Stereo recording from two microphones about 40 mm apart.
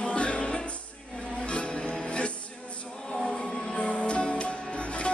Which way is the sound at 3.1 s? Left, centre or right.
Centre.